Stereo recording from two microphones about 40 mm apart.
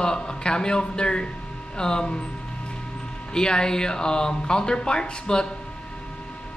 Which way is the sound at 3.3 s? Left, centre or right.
Centre.